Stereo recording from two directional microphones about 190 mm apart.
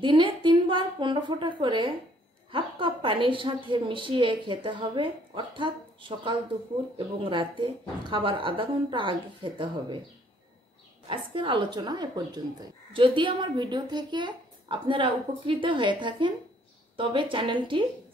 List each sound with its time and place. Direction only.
0.0 s a woman's voice: 25° right (ahead or behind)
11.1 s a woman's voice: 25° right (ahead or behind)